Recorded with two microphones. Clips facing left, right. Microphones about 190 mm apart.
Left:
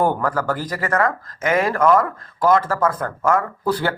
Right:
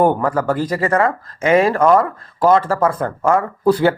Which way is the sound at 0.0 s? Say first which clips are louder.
Right 4 dB; 20° right (ahead or behind).